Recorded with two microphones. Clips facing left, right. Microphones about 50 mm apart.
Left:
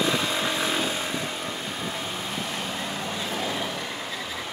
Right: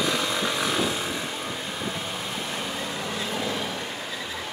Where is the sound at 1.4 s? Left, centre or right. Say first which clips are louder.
Even; centre.